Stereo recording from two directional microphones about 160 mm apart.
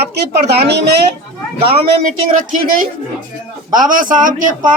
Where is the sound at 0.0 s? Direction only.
90° right.